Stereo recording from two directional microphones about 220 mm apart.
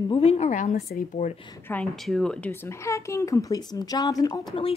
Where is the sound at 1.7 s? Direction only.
Centre (ahead or behind).